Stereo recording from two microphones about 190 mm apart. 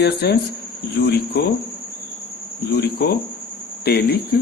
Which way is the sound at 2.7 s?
55° left (ahead or behind).